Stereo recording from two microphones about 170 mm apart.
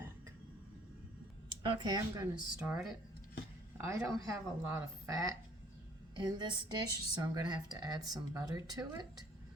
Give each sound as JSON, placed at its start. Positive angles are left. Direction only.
{"t": 1.6, "sound": "speech", "side_deg": -25}
{"t": 3.8, "sound": "a woman's voice", "side_deg": -15}